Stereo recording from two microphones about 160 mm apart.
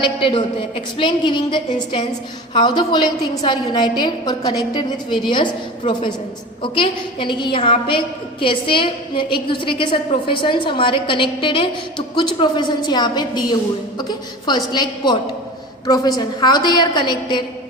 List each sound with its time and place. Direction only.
0.0 s a woman's voice: 35° left (ahead or behind)